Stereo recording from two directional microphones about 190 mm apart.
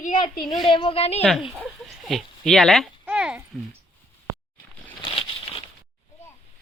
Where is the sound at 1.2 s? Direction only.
Centre (ahead or behind).